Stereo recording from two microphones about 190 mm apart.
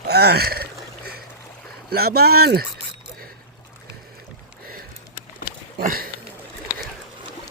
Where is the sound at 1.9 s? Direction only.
55° right (ahead or behind).